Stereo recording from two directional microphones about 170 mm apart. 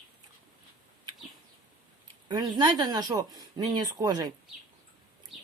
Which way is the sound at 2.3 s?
25° right (ahead or behind).